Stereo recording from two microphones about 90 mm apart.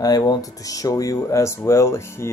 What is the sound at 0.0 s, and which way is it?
Speech, 45° left (ahead or behind).